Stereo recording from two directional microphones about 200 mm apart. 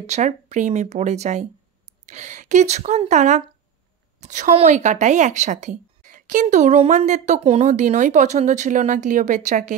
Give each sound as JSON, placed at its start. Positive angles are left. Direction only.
{"t": 0.0, "sound": "speech", "side_deg": -35}